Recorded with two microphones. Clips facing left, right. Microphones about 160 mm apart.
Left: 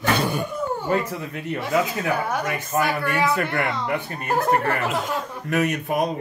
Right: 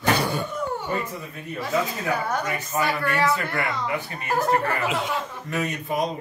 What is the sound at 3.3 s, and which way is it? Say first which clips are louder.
Speech: left 3 dB; 55° left (ahead or behind).